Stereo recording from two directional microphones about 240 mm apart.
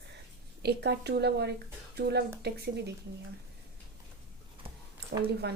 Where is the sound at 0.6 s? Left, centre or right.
Right.